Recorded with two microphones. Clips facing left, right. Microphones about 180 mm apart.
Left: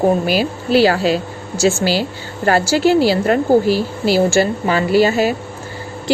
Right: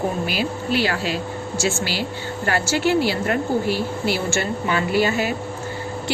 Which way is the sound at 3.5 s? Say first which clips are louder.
Left 8 dB; 90° left.